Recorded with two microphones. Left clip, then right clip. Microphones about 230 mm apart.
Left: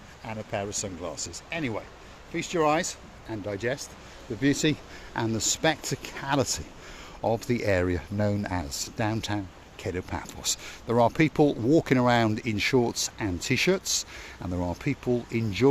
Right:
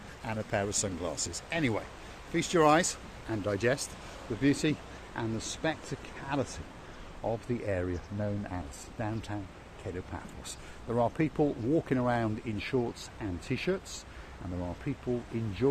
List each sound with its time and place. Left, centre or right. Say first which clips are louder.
0.3 s speech: even; centre
4.4 s speech: left 4 dB; left